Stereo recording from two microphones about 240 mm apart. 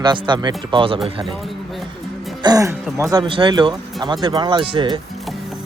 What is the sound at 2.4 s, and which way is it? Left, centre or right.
Speech, centre.